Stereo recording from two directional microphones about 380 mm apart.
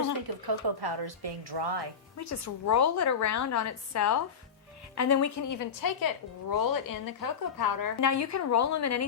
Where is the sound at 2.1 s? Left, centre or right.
Left.